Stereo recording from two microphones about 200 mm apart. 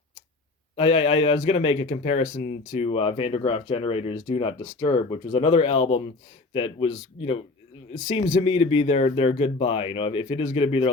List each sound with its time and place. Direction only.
0.8 s speech: 30° left (ahead or behind)
5.3 s speech: 30° left (ahead or behind)